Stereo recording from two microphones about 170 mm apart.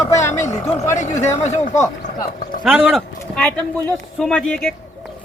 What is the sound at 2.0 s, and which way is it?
Speech, 55° left (ahead or behind).